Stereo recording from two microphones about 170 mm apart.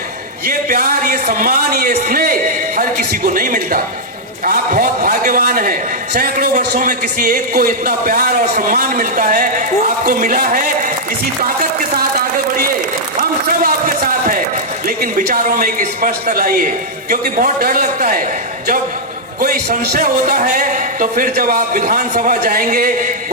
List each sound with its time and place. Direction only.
0.4 s a man's voice: 60° right (ahead or behind)
13.5 s a sound: 60° right (ahead or behind)
14.8 s a man's voice: 55° right (ahead or behind)
19.4 s a man's voice: 60° right (ahead or behind)